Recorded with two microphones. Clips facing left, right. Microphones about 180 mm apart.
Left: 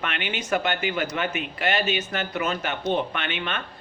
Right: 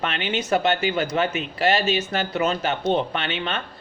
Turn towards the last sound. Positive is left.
turn(degrees=-30)  # may be behind; listen again after turning